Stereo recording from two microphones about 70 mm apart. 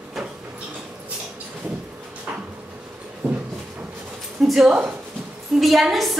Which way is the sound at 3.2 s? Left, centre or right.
Centre.